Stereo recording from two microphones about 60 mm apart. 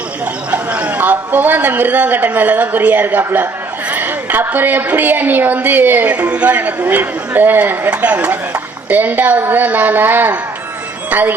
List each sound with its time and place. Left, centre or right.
0.5 s a man's voice: right